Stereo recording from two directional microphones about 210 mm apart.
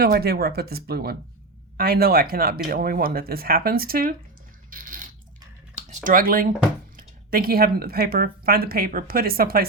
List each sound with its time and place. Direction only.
0.0 s speech: 45° right (ahead or behind)
4.7 s a sound: 40° right (ahead or behind)
6.9 s speech: 45° right (ahead or behind)